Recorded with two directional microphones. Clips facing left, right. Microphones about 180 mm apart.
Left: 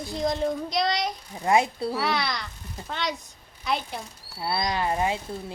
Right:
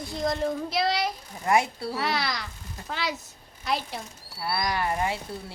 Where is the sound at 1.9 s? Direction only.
Centre (ahead or behind).